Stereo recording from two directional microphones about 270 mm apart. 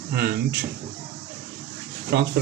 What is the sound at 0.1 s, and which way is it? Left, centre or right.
Speech, right.